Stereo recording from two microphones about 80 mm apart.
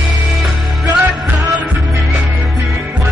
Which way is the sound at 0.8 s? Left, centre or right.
Right.